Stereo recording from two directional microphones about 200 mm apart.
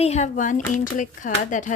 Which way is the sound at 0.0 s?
35° left (ahead or behind).